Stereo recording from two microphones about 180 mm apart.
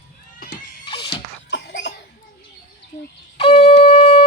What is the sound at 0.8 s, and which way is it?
Neigh, 25° left (ahead or behind).